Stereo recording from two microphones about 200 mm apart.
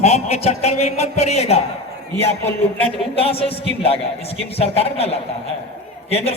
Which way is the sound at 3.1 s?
30° left (ahead or behind).